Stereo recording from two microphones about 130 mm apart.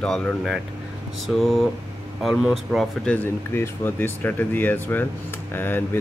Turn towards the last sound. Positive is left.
turn(degrees=15)  # may be behind; listen again after turning